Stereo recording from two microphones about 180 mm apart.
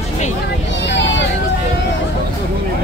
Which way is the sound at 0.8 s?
75° left (ahead or behind).